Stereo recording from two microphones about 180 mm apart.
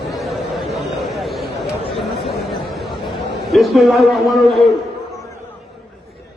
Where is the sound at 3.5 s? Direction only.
Centre (ahead or behind).